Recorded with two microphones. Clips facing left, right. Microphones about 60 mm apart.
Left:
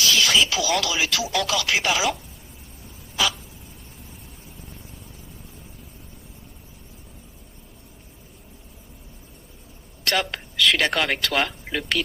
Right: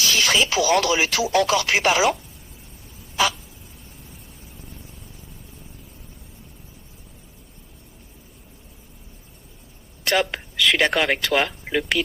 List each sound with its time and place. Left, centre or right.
0.1 s speech: right
10.0 s a sound: centre
10.9 s speech: centre